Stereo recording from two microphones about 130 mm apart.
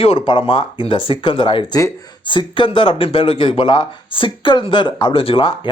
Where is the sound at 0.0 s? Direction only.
40° left (ahead or behind).